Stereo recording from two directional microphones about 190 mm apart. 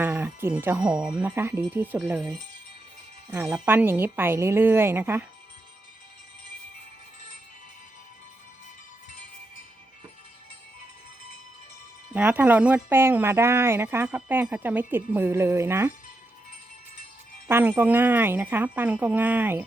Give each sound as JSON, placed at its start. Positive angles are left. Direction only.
{"t": 0.0, "sound": "speech", "side_deg": -10}
{"t": 3.2, "sound": "speech", "side_deg": -15}
{"t": 12.1, "sound": "speech", "side_deg": -10}
{"t": 17.5, "sound": "speech", "side_deg": -10}